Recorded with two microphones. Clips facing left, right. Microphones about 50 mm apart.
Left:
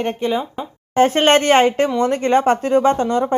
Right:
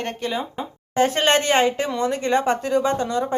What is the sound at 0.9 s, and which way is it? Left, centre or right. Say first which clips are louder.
A woman's voice: left 5 dB; left.